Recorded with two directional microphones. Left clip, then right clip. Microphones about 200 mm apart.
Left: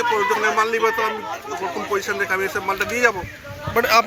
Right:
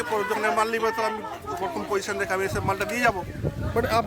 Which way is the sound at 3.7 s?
5° right (ahead or behind).